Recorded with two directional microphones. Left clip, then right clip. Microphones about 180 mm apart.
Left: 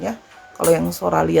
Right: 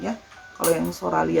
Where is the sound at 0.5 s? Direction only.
45° left (ahead or behind).